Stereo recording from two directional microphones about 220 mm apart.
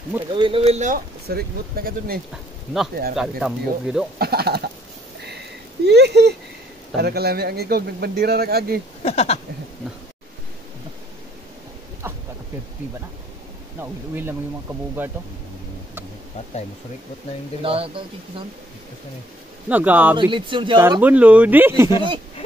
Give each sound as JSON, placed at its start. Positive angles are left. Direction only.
{"t": 0.3, "sound": "speech", "side_deg": -25}
{"t": 2.3, "sound": "speech", "side_deg": 0}
{"t": 4.2, "sound": "a man's voice", "side_deg": -45}
{"t": 5.9, "sound": "a man's voice", "side_deg": -50}
{"t": 9.0, "sound": "speech", "side_deg": 30}
{"t": 12.0, "sound": "a sound", "side_deg": -10}
{"t": 13.7, "sound": "speech", "side_deg": -10}
{"t": 17.6, "sound": "speech", "side_deg": -25}
{"t": 19.7, "sound": "speech", "side_deg": -5}
{"t": 20.2, "sound": "speech", "side_deg": -20}
{"t": 20.8, "sound": "speech", "side_deg": -10}